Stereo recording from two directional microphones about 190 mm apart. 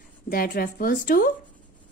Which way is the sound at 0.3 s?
50° left (ahead or behind).